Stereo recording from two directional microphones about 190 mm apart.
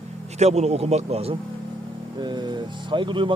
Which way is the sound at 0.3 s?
35° right (ahead or behind).